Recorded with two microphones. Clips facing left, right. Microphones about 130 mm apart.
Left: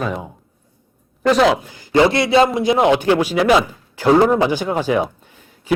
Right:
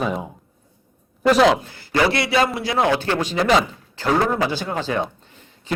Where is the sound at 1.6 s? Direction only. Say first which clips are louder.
Left 5 dB; 15° left (ahead or behind).